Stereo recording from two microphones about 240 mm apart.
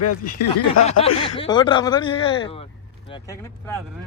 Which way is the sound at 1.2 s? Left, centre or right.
Left.